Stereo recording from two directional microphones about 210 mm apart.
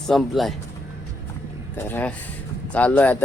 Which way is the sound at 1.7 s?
10° left (ahead or behind).